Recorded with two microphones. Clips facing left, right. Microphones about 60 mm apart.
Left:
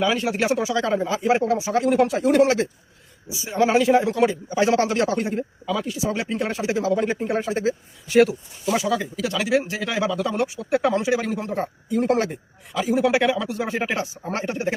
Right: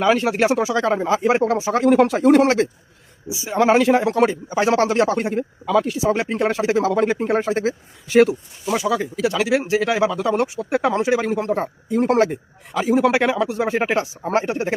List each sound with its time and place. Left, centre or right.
0.0 s speech: right
6.0 s speech: right